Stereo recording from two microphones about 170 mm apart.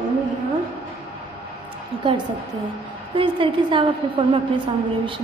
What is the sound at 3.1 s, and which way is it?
Speech, 30° right (ahead or behind).